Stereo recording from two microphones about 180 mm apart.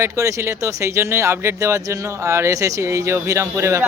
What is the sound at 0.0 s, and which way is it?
Speech, 15° right (ahead or behind).